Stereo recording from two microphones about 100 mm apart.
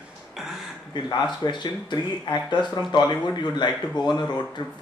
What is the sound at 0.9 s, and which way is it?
Speech, 50° left (ahead or behind).